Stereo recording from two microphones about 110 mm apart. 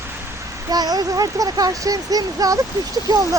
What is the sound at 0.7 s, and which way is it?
Speech, 35° right (ahead or behind).